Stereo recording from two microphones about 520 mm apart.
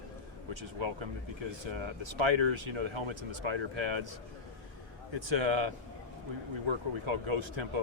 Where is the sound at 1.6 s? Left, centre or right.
Right.